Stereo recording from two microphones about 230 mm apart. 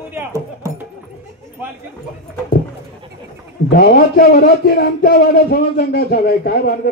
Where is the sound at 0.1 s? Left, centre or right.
Centre.